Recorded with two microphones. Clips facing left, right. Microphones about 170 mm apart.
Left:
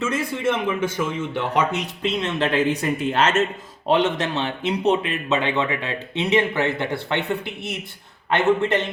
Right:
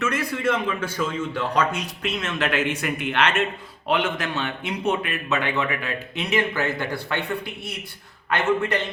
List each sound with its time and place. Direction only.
0.0 s speech: 25° left (ahead or behind)